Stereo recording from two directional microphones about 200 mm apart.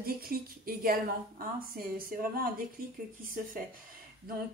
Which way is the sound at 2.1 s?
45° right (ahead or behind).